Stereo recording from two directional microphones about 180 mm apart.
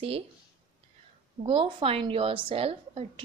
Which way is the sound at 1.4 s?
30° right (ahead or behind).